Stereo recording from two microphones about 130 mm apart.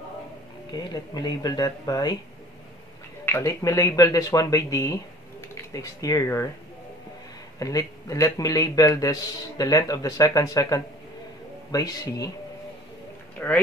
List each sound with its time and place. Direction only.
0.7 s speech: 35° left (ahead or behind)
3.3 s a man's voice: 20° left (ahead or behind)
7.5 s a man's voice: 25° left (ahead or behind)
13.4 s speech: 10° left (ahead or behind)